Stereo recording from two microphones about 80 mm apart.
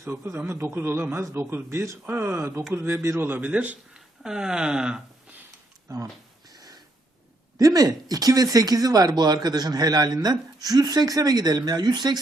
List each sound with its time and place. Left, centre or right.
0.0 s a man's voice: right
3.9 s speech: centre
5.9 s speech: right
6.5 s snort: right
7.6 s speech: right